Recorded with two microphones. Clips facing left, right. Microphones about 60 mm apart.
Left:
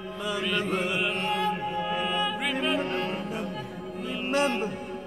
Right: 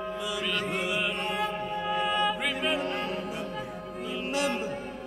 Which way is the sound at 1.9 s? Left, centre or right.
Centre.